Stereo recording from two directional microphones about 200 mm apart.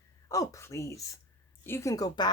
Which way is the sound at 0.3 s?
15° left (ahead or behind).